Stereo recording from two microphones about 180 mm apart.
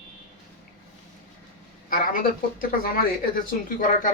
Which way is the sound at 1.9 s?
50° left (ahead or behind).